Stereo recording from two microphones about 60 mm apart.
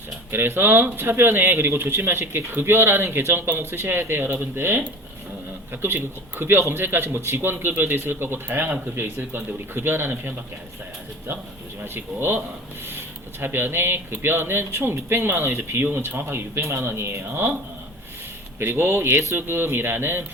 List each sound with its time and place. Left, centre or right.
0.3 s speech: right
11.9 s speech: right
18.6 s speech: right